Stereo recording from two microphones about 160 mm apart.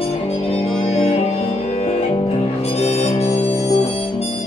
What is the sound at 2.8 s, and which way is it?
Harmonica, 40° left (ahead or behind).